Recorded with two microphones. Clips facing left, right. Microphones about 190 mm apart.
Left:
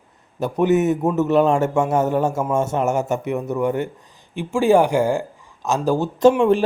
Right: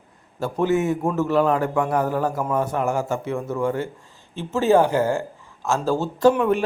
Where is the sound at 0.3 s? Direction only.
20° left (ahead or behind).